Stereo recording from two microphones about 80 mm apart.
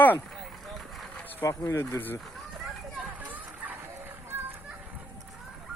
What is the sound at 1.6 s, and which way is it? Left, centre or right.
Speech, left.